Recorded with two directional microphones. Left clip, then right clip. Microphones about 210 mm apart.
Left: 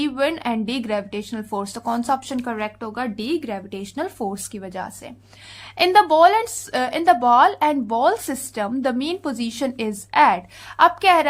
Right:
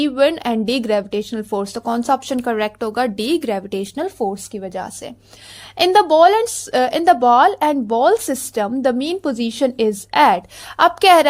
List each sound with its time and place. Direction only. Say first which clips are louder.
0.0 s speech: right 6 dB; 30° right (ahead or behind)
3.9 s speech: right 2 dB; 15° right (ahead or behind); by 11.3 s 35° right (ahead or behind)